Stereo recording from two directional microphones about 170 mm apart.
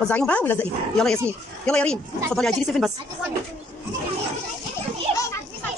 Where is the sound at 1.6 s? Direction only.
5° left (ahead or behind).